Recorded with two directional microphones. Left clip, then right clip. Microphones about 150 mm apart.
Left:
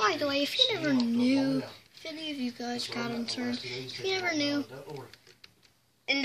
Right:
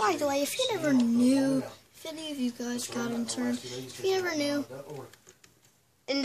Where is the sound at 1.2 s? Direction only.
60° right (ahead or behind).